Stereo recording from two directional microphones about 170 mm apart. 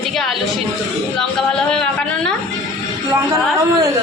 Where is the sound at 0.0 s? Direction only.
Centre (ahead or behind).